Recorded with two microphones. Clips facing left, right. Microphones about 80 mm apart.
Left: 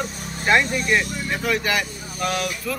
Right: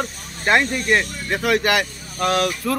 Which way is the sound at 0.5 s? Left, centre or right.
Right.